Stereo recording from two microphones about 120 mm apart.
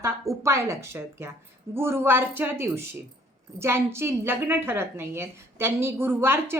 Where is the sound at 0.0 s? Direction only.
25° right (ahead or behind).